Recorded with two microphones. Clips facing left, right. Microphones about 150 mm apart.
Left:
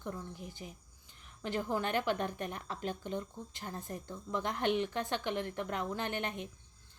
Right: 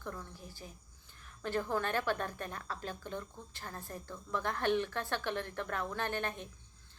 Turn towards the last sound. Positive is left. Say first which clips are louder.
# even
turn(degrees=15)  # may be behind; listen again after turning